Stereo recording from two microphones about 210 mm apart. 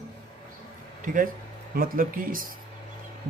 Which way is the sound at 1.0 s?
40° right (ahead or behind).